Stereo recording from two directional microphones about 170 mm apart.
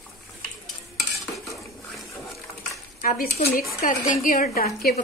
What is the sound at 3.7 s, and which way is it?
A woman's voice, 50° left (ahead or behind).